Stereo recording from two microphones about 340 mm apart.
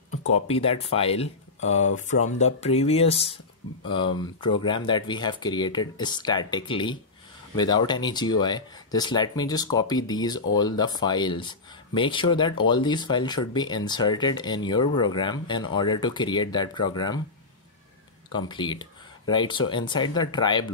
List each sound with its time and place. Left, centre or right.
0.5 s speech: centre
18.3 s speech: centre